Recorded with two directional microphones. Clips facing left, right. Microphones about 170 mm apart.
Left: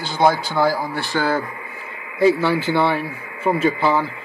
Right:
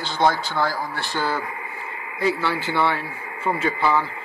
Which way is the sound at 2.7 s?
20° left (ahead or behind).